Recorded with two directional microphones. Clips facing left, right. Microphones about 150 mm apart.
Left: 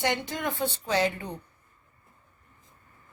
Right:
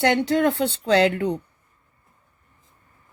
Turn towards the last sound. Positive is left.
turn(degrees=-70)  # may be behind; listen again after turning